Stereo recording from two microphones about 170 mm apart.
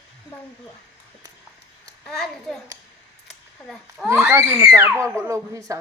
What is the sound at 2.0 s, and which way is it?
Speech, 5° left (ahead or behind).